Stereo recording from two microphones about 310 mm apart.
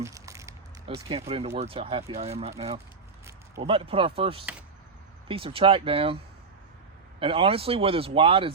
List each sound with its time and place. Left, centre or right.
0.0 s a sound: centre
1.5 s speech: centre
7.2 s speech: centre